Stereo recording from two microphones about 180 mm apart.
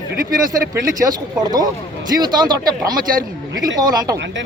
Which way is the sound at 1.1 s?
20° right (ahead or behind).